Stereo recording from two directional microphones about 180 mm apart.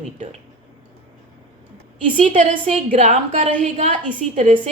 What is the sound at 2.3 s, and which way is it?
A woman's voice, 35° right (ahead or behind).